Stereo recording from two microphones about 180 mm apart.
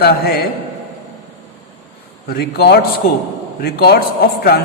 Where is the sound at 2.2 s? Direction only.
60° left (ahead or behind).